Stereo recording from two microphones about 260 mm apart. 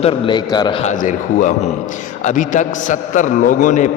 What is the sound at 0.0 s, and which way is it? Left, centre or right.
A man's voice, centre.